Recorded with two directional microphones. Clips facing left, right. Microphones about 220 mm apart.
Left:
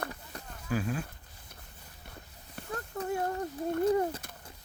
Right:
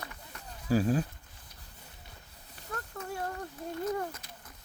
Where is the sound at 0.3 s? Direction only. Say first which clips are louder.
Left 4 dB; 35° left (ahead or behind).